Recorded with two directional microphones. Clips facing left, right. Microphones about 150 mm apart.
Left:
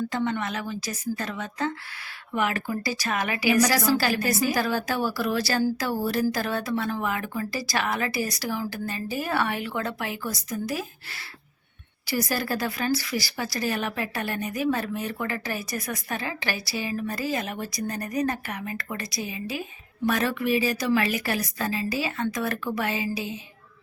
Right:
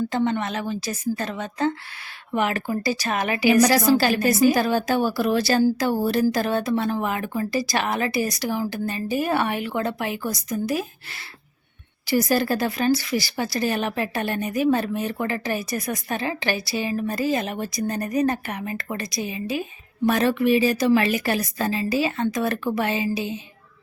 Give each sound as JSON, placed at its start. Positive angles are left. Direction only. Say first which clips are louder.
{"t": 0.1, "sound": "a woman's voice", "louder": "right 4 dB", "side_deg": -25}